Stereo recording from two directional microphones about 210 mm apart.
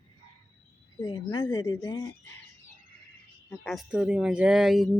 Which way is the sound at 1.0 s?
20° left (ahead or behind).